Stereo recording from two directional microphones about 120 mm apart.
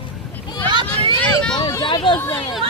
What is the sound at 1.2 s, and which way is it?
Vehicle, 5° left (ahead or behind).